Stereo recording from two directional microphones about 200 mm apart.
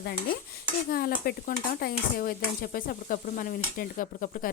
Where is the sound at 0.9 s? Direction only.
45° left (ahead or behind).